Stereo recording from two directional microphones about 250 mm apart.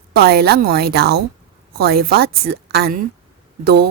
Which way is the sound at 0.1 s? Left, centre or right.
Right.